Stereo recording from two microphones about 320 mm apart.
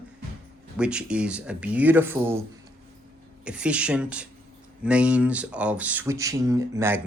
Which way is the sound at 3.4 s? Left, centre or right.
Centre.